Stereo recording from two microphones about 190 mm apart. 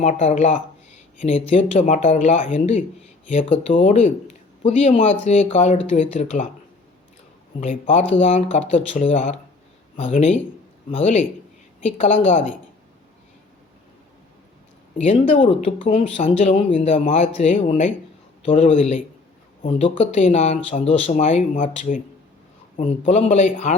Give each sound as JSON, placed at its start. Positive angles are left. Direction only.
{"t": 0.0, "sound": "speech", "side_deg": 35}
{"t": 7.6, "sound": "speech", "side_deg": 40}
{"t": 14.9, "sound": "speech", "side_deg": 35}